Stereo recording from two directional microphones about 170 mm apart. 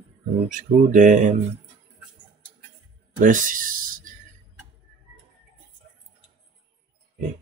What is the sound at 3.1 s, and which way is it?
Speech, 50° right (ahead or behind).